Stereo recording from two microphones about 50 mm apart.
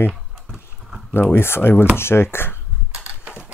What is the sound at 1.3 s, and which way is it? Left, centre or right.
Speech, left.